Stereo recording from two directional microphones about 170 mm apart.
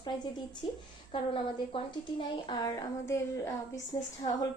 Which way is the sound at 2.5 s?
20° left (ahead or behind).